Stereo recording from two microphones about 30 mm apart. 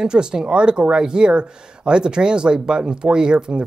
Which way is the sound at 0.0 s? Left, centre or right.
Right.